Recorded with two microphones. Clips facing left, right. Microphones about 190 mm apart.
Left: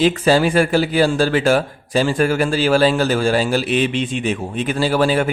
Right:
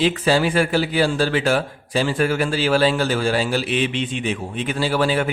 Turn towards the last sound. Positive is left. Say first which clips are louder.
# left 3 dB
turn(degrees=40)  # may be behind; listen again after turning